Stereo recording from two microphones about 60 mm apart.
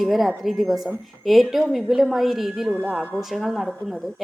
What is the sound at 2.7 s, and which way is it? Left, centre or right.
Speech, right.